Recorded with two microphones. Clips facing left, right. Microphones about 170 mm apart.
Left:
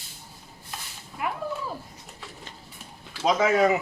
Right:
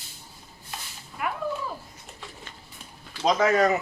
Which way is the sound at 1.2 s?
25° left (ahead or behind).